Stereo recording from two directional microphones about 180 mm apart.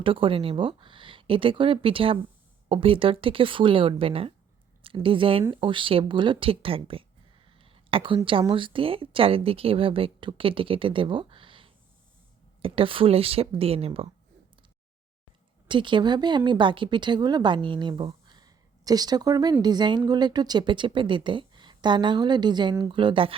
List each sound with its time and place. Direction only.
0.0 s speech: 30° right (ahead or behind)
15.6 s speech: 25° right (ahead or behind)